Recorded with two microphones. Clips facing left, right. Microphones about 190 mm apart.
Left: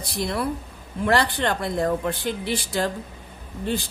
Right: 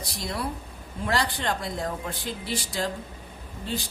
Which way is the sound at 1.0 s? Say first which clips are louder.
Left 5 dB; 60° left (ahead or behind).